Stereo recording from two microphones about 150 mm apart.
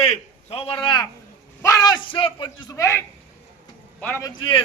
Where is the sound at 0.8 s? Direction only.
30° left (ahead or behind).